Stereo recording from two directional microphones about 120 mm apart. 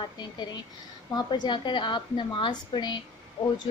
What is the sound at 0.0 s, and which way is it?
A woman's voice, 40° left (ahead or behind).